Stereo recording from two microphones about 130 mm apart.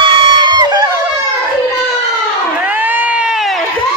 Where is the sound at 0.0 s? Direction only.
35° right (ahead or behind).